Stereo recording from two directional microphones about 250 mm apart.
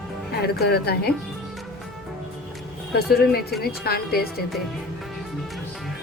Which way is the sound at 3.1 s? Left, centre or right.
Left.